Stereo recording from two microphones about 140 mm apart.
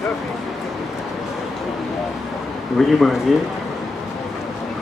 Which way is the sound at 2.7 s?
Centre (ahead or behind).